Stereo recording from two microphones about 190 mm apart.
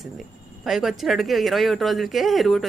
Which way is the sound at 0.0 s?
Centre (ahead or behind).